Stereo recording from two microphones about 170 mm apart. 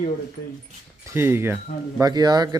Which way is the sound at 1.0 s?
15° right (ahead or behind).